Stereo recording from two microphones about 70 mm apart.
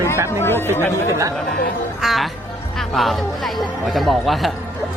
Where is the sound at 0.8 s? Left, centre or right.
Left.